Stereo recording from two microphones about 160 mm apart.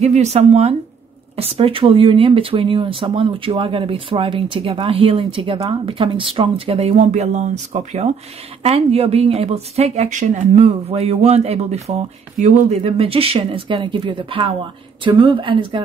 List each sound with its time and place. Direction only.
0.0 s speech: 45° right (ahead or behind)
12.8 s speech: 35° right (ahead or behind)